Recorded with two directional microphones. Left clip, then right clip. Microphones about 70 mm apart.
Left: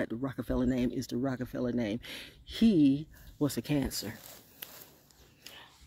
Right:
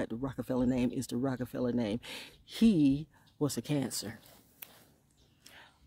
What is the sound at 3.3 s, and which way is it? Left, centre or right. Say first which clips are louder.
Speech: left 2 dB; right.